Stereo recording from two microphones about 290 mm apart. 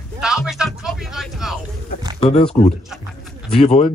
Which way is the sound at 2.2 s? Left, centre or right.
Left.